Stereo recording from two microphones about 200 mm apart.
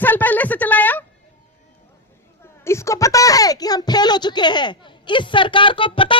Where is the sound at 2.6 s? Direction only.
15° left (ahead or behind).